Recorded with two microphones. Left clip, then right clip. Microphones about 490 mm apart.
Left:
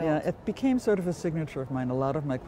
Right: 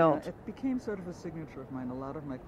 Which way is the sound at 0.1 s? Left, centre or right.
Left.